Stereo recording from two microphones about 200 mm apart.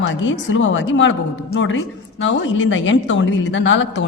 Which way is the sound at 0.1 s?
65° left (ahead or behind).